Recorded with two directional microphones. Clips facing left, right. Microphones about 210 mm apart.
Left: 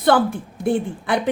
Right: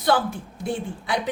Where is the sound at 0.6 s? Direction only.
55° left (ahead or behind).